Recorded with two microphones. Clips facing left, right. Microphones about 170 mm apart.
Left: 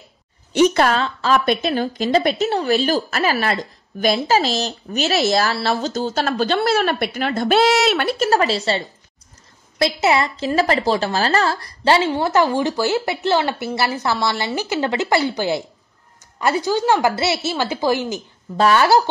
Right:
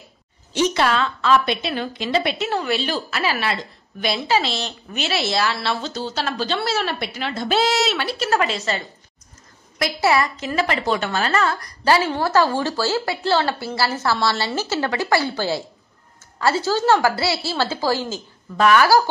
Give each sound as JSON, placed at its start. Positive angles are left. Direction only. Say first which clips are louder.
{"t": 0.5, "sound": "a woman's voice", "louder": "left 4 dB", "side_deg": 50}
{"t": 8.3, "sound": "a woman's voice", "louder": "left 2 dB", "side_deg": 35}
{"t": 18.6, "sound": "speech", "louder": "left 1 dB", "side_deg": 30}